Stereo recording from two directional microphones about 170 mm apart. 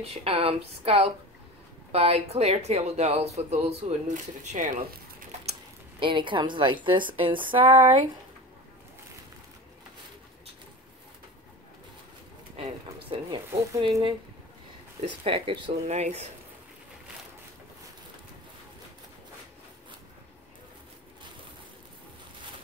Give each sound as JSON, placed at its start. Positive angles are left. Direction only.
{"t": 0.0, "sound": "speech", "side_deg": -35}
{"t": 5.9, "sound": "speech", "side_deg": -30}
{"t": 13.1, "sound": "speech", "side_deg": -30}